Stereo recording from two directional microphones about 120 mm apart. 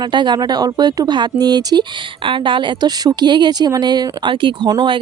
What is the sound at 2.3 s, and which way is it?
Speech, 45° right (ahead or behind).